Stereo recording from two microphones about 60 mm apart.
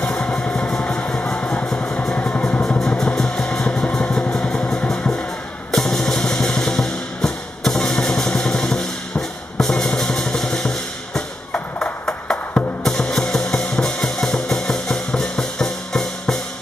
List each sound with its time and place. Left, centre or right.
0.0 s music: centre
2.1 s vehicle: centre
3.0 s music: centre
9.6 s drum: centre
11.5 s music: centre
12.8 s music: centre